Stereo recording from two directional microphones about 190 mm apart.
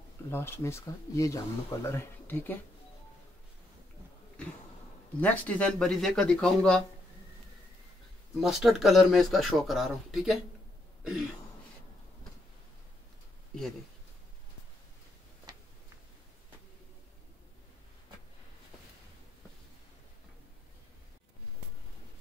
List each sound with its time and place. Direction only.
0.3 s speech: 10° left (ahead or behind)
5.2 s speech: 10° left (ahead or behind)
8.4 s speech: centre (ahead or behind)
15.5 s tick-tock: 20° right (ahead or behind)